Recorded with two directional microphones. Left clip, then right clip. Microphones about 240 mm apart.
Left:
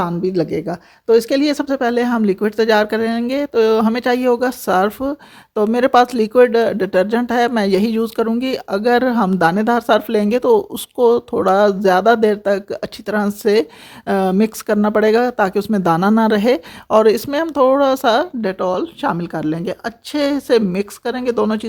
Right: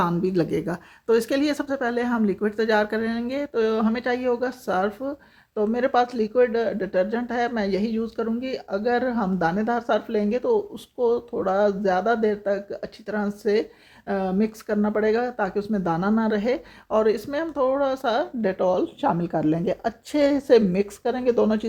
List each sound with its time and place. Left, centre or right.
0.0 s speech: left
18.4 s a woman's voice: centre